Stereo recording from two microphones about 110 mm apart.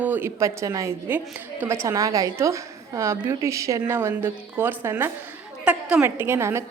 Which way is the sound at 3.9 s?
20° right (ahead or behind).